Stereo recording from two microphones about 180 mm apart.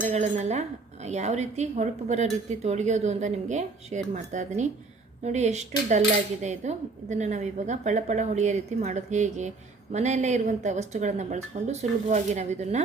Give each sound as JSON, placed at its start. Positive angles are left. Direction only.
{"t": 0.0, "sound": "a woman's voice", "side_deg": -40}